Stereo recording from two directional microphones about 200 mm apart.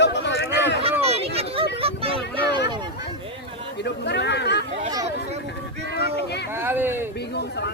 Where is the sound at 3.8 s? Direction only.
60° left (ahead or behind).